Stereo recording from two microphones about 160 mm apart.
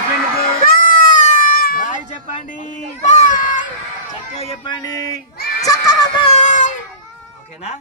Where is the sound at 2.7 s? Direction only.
50° left (ahead or behind).